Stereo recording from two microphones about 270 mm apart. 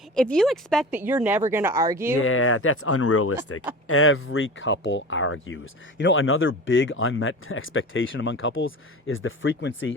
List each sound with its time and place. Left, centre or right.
0.1 s speech: centre
2.1 s speech: left